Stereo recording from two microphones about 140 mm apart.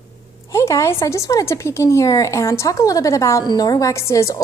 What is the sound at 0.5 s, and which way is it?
A woman's voice, 20° left (ahead or behind).